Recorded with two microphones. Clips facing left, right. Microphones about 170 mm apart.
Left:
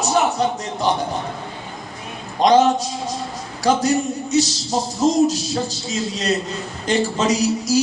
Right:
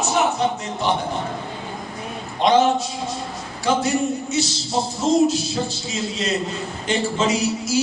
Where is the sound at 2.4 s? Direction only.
40° left (ahead or behind).